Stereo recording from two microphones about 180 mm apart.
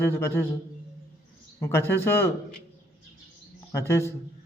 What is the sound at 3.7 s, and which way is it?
Speech, 15° left (ahead or behind).